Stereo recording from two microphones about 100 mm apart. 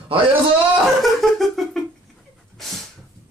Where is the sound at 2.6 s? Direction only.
Centre (ahead or behind).